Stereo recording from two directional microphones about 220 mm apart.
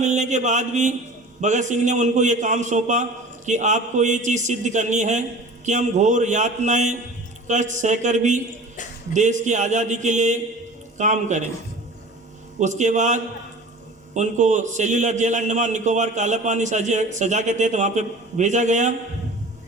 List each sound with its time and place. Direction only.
0.0 s a man's voice: 35° right (ahead or behind)
12.5 s a man's voice: 35° right (ahead or behind)